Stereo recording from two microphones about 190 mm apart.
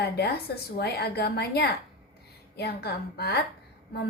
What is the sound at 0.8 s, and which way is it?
A woman's voice, 55° left (ahead or behind).